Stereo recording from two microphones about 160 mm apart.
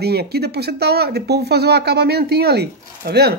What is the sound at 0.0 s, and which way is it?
Speech, 85° right.